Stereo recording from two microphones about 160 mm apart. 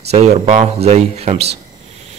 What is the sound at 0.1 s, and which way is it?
Speech, 45° right (ahead or behind).